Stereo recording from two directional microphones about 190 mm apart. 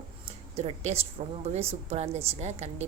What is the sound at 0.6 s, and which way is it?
A woman's voice, 35° right (ahead or behind).